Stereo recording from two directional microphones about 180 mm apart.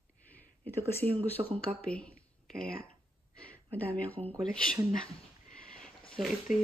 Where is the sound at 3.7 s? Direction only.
10° left (ahead or behind).